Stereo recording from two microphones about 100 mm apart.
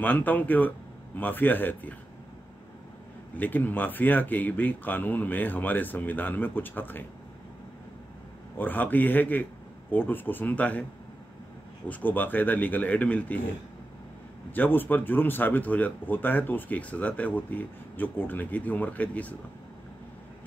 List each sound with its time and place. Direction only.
0.0 s speech: 15° left (ahead or behind)
3.3 s speech: 15° left (ahead or behind)
8.5 s speech: 20° left (ahead or behind)
11.9 s speech: 20° left (ahead or behind)
14.5 s speech: 20° left (ahead or behind)